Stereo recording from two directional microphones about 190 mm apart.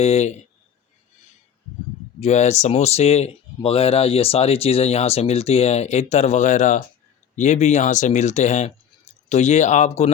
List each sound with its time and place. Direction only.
0.0 s speech: 35° left (ahead or behind)
2.2 s speech: 35° left (ahead or behind)